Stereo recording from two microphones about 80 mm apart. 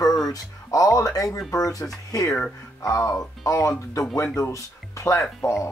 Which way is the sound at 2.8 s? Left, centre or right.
Left.